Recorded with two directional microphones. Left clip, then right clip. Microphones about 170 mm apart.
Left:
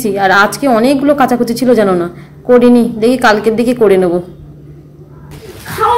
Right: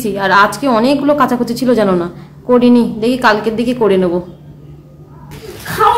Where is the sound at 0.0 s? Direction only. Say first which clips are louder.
Left 1 dB; 15° left (ahead or behind).